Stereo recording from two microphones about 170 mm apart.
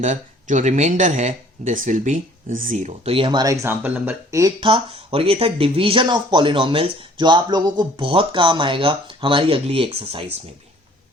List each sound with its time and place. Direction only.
0.0 s speech: 45° right (ahead or behind); by 4.5 s 20° right (ahead or behind)
4.6 s speech: 30° right (ahead or behind)